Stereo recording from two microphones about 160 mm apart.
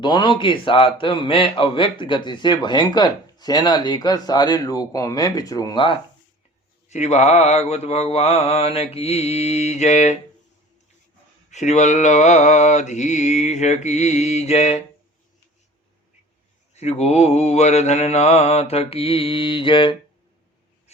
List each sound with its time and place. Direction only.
0.0 s a man's voice: 30° left (ahead or behind)
6.8 s mantra: 45° left (ahead or behind)
11.5 s mantra: 45° left (ahead or behind)
16.7 s mantra: 45° left (ahead or behind)